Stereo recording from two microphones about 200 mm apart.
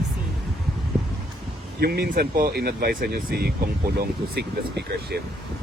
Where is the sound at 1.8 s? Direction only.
50° right (ahead or behind).